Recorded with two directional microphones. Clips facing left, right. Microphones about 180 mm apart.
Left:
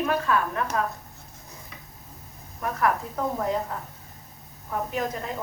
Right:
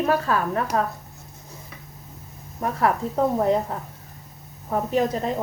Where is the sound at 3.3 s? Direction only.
30° right (ahead or behind).